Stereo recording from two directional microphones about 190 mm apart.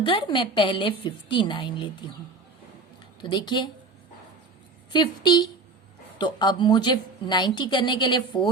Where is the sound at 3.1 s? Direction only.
25° left (ahead or behind).